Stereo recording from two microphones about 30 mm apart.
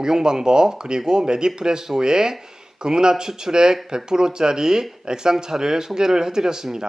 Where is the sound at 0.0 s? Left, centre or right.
Right.